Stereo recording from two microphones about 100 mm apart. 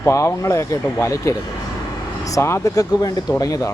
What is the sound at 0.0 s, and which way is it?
A man's voice, 30° left (ahead or behind).